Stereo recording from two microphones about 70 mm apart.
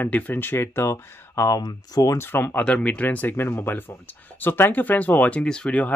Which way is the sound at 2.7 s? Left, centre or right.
Centre.